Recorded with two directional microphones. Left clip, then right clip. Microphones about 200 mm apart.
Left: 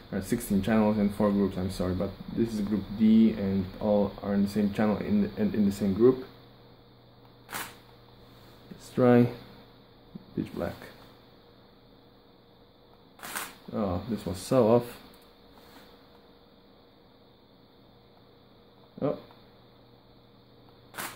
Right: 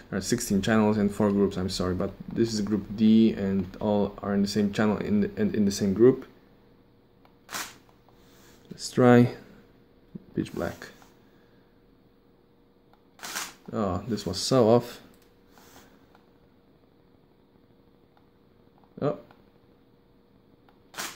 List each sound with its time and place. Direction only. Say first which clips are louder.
0.1 s speech: right 3 dB; 25° right (ahead or behind)
8.7 s speech: right 3 dB; 25° right (ahead or behind)
13.7 s speech: right 2 dB; 20° right (ahead or behind)